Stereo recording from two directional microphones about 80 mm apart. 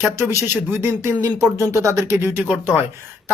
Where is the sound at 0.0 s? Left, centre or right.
Right.